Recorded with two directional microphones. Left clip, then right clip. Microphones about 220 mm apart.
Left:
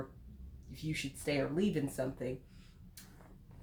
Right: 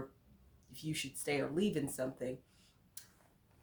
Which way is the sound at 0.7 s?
30° right (ahead or behind).